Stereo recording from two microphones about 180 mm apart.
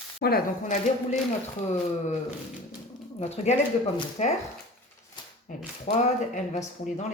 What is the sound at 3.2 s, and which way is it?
Speech, 35° left (ahead or behind).